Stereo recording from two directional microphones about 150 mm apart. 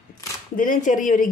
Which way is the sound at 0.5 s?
60° left (ahead or behind).